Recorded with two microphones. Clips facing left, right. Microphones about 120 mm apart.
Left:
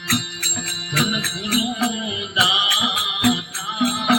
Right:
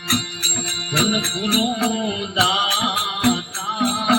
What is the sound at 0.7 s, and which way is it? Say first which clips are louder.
Music: right 2 dB; 50° right (ahead or behind).